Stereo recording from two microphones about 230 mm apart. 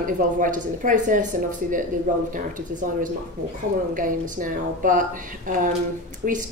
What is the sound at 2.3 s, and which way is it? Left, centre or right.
A woman's voice, right.